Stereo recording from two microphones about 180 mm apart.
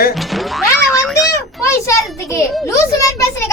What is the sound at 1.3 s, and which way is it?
Children playing, 15° left (ahead or behind).